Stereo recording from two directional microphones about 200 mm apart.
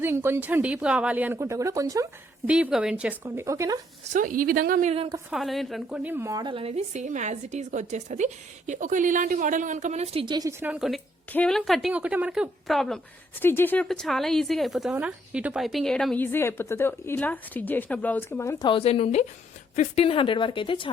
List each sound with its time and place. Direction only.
0.0 s speech: 10° right (ahead or behind)
2.5 s speech: 5° right (ahead or behind)
4.1 s speech: 45° right (ahead or behind)
5.3 s a woman's voice: centre (ahead or behind); by 10.7 s 20° right (ahead or behind)
10.7 s a woman's voice: centre (ahead or behind); by 18.7 s 15° left (ahead or behind)
18.7 s a woman's voice: 30° left (ahead or behind)